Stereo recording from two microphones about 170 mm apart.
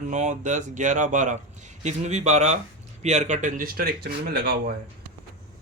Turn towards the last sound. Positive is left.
turn(degrees=-65)  # may be behind; listen again after turning